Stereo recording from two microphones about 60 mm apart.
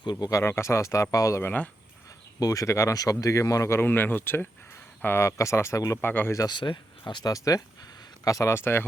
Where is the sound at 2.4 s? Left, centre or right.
Left.